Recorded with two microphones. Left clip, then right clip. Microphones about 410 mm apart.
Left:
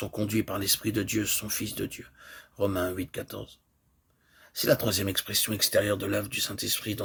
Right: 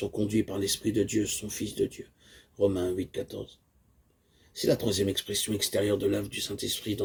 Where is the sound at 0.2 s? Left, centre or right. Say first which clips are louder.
Even; left.